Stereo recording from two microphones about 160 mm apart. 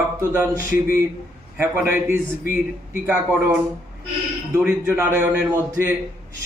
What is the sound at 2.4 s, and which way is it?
Speech, 55° left (ahead or behind).